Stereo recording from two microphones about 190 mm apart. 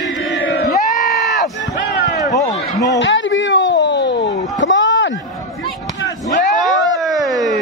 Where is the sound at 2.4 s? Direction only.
20° left (ahead or behind).